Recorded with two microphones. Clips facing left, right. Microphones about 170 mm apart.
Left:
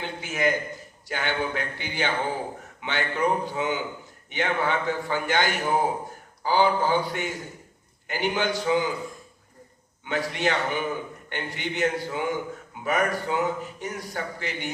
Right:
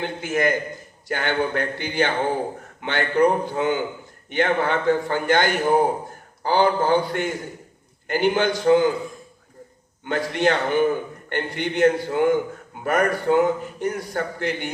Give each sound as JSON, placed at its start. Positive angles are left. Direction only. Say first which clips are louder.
{"t": 0.0, "sound": "a man's voice", "louder": "right 4 dB", "side_deg": -55}
{"t": 10.0, "sound": "a man's voice", "louder": "right 5 dB", "side_deg": -55}